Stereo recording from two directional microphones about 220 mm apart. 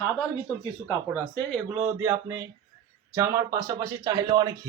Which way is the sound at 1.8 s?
10° right (ahead or behind).